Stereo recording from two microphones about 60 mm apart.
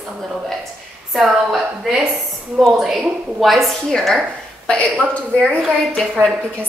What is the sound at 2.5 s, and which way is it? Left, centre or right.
A woman's voice, centre.